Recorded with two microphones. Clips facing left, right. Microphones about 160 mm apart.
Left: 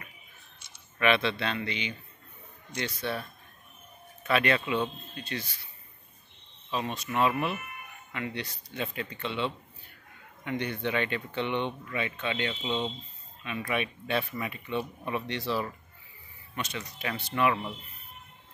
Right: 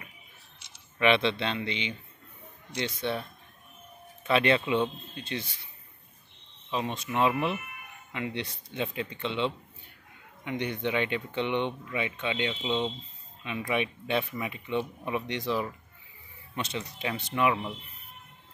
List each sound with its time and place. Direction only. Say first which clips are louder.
0.6 s a sound: even; 90° right
0.9 s speech: right 2 dB; 20° right (ahead or behind)
6.7 s speech: right 1 dB; 20° right (ahead or behind)
17.1 s speech: even; 15° right (ahead or behind)